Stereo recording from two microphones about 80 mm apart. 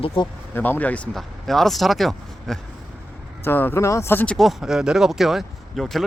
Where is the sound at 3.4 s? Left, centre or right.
Left.